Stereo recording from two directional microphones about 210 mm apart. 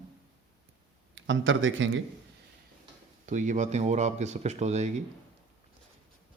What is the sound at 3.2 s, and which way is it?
Speech, 35° right (ahead or behind).